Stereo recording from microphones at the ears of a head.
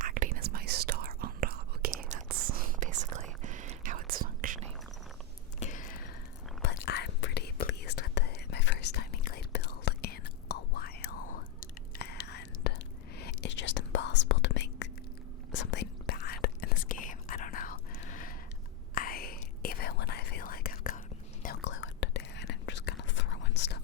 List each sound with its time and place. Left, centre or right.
0.0 s whispering: right
5.5 s whispering: left